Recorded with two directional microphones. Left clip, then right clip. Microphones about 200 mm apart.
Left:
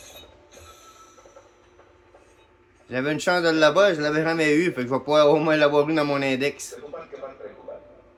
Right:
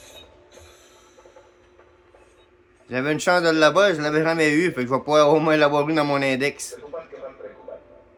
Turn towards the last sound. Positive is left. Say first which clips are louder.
# right 2 dB
turn(degrees=-30)  # may be behind; listen again after turning